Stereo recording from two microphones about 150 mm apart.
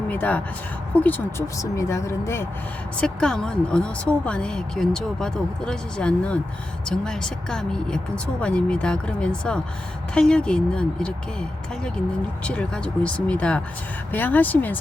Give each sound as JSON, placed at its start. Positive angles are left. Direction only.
{"t": 0.1, "sound": "speech", "side_deg": 10}
{"t": 3.0, "sound": "speech", "side_deg": 5}
{"t": 12.5, "sound": "speech", "side_deg": 5}